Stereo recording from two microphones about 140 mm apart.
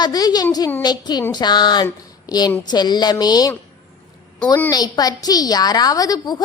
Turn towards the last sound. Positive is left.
turn(degrees=30)  # may be behind; listen again after turning